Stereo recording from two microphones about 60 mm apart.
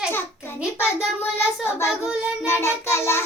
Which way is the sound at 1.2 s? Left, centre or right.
Left.